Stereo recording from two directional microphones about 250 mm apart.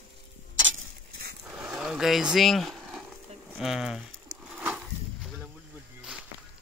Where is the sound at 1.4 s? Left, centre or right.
Centre.